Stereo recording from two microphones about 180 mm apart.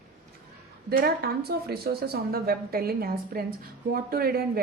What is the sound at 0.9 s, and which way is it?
A woman's voice, 60° right (ahead or behind).